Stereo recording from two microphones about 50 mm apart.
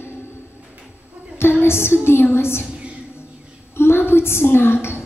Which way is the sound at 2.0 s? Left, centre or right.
Left.